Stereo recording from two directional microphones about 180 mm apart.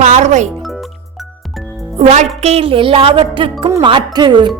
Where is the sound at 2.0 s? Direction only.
40° right (ahead or behind).